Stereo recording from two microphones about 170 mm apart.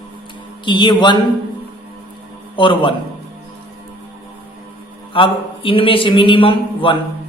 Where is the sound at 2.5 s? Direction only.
30° left (ahead or behind).